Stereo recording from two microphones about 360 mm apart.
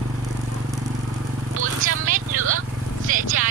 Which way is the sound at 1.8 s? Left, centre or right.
Right.